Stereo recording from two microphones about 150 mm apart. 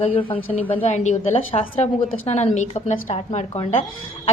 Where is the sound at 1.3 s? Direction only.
40° left (ahead or behind).